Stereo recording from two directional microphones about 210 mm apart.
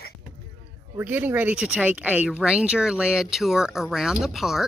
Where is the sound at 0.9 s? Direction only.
10° right (ahead or behind).